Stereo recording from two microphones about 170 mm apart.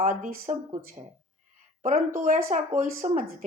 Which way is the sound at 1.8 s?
50° right (ahead or behind).